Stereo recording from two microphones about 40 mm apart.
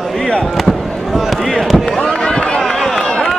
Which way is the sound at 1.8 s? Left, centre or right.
Centre.